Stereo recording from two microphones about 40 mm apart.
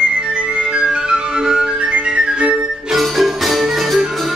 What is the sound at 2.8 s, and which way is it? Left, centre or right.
Music, centre.